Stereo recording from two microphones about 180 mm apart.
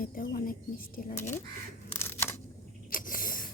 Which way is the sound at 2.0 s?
15° left (ahead or behind).